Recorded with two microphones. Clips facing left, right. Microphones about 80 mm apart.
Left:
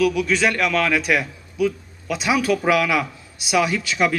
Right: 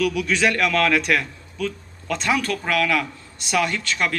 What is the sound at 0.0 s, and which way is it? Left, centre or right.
A man's voice, centre.